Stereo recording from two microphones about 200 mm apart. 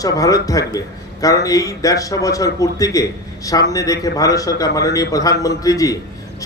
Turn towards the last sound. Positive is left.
turn(degrees=15)  # may be behind; listen again after turning